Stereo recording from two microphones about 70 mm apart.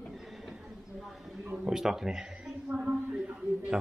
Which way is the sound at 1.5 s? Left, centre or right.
Centre.